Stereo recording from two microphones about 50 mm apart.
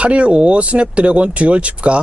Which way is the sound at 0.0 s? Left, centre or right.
Right.